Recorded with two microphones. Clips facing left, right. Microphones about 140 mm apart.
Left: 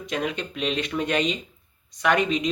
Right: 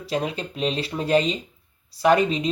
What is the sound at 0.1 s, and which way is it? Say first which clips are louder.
Speech: right 2 dB; 35° right (ahead or behind).